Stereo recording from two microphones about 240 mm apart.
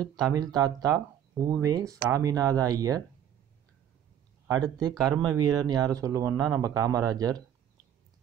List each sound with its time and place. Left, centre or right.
0.3 s speech: centre
4.5 s speech: centre